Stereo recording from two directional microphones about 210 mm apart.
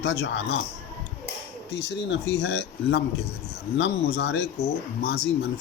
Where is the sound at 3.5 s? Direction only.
55° left (ahead or behind).